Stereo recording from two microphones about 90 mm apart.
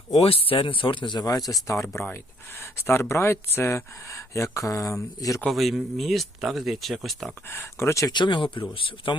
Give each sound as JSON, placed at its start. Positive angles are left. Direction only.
{"t": 0.3, "sound": "speech", "side_deg": 90}
{"t": 1.2, "sound": "speech", "side_deg": 45}
{"t": 1.6, "sound": "speech", "side_deg": 35}
{"t": 5.5, "sound": "speech", "side_deg": 0}
{"t": 7.5, "sound": "speech", "side_deg": 30}
{"t": 8.1, "sound": "speech", "side_deg": 60}